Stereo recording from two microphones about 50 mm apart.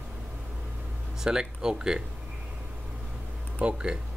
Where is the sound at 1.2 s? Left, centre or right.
Centre.